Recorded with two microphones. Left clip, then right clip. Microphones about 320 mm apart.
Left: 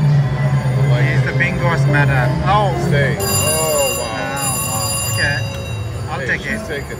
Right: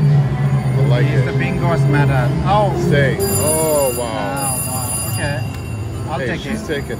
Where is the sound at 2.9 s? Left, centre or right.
Right.